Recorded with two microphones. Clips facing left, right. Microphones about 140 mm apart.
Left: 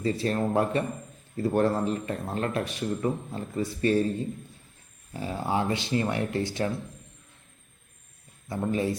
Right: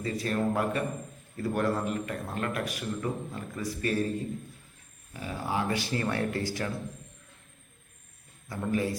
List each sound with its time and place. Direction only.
0.0 s a man's voice: 30° left (ahead or behind)
5.1 s a man's voice: 30° left (ahead or behind)
8.4 s a man's voice: 25° left (ahead or behind)